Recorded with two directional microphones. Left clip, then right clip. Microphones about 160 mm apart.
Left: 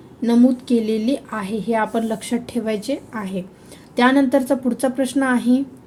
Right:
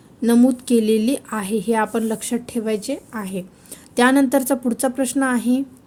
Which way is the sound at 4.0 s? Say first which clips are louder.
Even; 45° right (ahead or behind).